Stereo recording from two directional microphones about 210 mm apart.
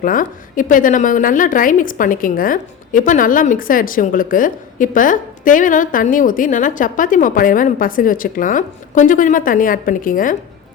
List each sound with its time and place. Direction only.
0.0 s a woman's voice: 40° left (ahead or behind)